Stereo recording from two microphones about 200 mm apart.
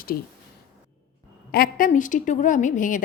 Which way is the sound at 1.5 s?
50° left (ahead or behind).